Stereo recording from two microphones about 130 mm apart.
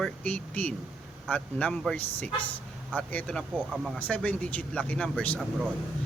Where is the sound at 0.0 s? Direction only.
10° left (ahead or behind).